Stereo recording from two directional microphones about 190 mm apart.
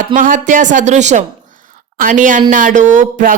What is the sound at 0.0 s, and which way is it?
Speech, 45° right (ahead or behind).